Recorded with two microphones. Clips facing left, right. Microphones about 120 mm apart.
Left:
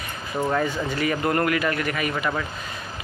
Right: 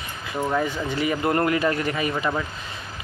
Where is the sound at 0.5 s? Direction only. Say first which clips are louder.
Even; 15° right (ahead or behind).